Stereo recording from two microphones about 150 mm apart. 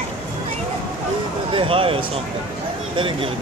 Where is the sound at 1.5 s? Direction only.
35° right (ahead or behind).